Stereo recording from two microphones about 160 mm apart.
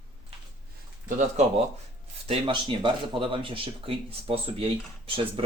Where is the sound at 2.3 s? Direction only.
35° right (ahead or behind).